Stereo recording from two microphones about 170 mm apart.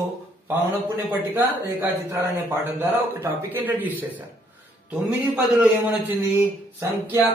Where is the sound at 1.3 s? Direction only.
10° right (ahead or behind).